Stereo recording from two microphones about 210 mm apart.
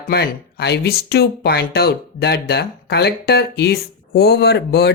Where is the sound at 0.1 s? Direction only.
50° left (ahead or behind).